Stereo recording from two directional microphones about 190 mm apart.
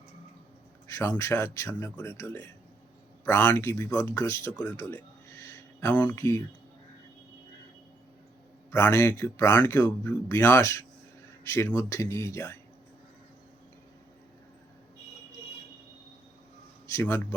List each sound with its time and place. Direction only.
0.9 s speech: 15° left (ahead or behind)
8.7 s speech: 15° left (ahead or behind)
16.9 s speech: 15° left (ahead or behind)